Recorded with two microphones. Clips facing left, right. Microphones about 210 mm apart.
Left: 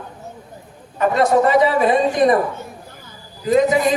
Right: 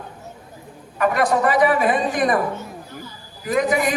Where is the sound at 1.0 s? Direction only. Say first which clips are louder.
Left 3 dB; 25° left (ahead or behind).